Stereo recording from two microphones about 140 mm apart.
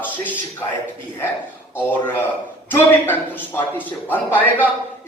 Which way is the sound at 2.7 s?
15° left (ahead or behind).